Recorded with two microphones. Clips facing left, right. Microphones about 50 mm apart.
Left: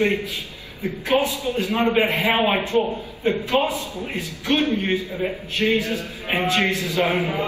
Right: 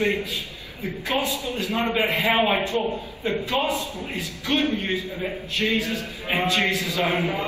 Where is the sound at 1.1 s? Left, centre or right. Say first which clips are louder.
Left 5 dB; left.